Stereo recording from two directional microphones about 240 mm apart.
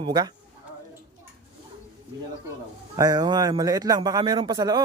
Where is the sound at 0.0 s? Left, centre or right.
Centre.